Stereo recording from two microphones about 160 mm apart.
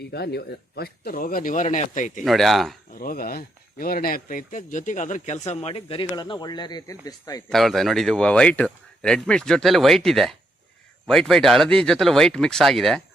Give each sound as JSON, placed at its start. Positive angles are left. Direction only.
{"t": 0.1, "sound": "speech", "side_deg": 90}
{"t": 2.2, "sound": "speech", "side_deg": 0}
{"t": 2.9, "sound": "speech", "side_deg": 65}
{"t": 7.5, "sound": "speech", "side_deg": 0}